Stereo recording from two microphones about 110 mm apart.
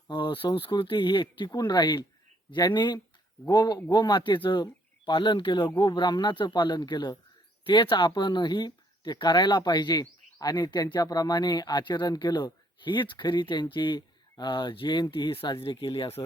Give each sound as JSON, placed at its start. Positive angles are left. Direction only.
{"t": 0.1, "sound": "speech", "side_deg": 50}